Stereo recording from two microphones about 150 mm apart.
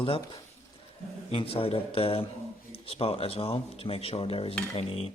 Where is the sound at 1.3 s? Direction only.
40° left (ahead or behind).